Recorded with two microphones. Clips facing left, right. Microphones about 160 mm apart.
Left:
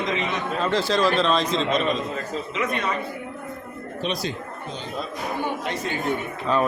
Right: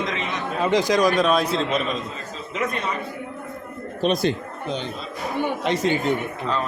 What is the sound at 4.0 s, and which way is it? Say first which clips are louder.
Speech: right 7 dB; 50° right (ahead or behind).